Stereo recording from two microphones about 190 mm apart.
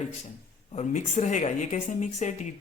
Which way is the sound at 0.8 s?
40° left (ahead or behind).